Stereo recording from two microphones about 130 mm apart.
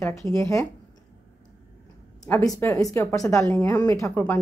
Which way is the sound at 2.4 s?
25° left (ahead or behind).